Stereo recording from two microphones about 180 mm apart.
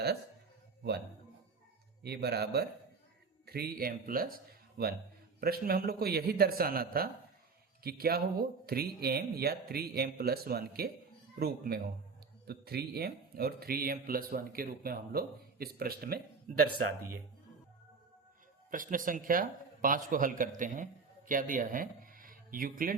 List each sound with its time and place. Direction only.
2.0 s a man's voice: 65° right (ahead or behind)
18.7 s speech: 50° right (ahead or behind)